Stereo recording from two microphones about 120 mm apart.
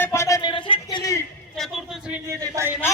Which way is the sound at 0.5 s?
40° left (ahead or behind).